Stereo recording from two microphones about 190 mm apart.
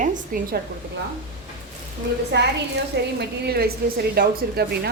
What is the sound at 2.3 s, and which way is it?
A woman's voice, 65° right (ahead or behind).